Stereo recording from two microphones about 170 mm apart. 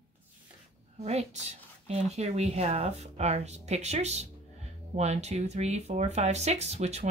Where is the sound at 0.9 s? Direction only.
40° right (ahead or behind).